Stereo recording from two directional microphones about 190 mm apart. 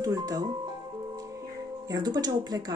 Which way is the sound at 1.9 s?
20° right (ahead or behind).